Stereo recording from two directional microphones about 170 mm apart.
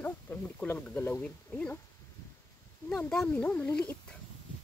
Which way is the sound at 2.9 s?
5° left (ahead or behind).